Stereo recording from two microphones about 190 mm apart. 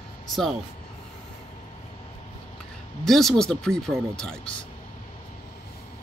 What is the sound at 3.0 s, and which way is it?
Speech, centre (ahead or behind).